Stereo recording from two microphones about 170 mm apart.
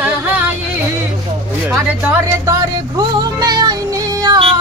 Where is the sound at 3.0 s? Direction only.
25° right (ahead or behind).